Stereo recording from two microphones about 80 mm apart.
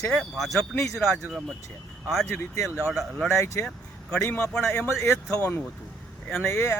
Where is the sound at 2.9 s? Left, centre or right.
Centre.